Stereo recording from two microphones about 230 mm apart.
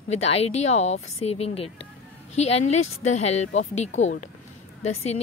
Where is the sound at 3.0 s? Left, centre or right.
Left.